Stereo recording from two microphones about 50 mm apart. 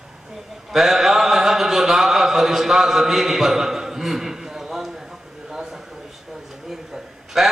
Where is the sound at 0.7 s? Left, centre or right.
Centre.